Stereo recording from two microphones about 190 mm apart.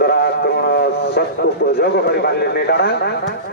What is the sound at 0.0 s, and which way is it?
A man's voice, 55° left (ahead or behind).